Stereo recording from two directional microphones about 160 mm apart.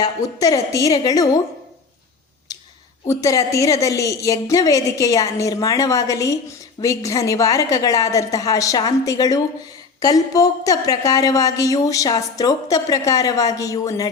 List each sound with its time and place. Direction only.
0.0 s a woman's voice: 20° left (ahead or behind)
2.5 s a sound: 25° left (ahead or behind)
3.1 s a woman's voice: 20° left (ahead or behind)